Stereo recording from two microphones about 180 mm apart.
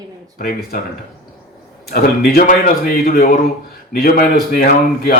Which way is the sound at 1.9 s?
55° left (ahead or behind).